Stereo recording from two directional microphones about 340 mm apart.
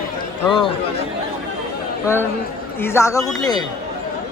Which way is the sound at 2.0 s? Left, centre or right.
Centre.